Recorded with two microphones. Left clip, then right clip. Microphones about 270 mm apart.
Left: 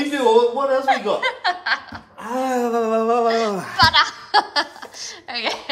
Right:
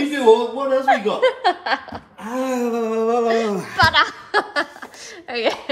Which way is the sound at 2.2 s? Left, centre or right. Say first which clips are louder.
Left 2 dB; centre.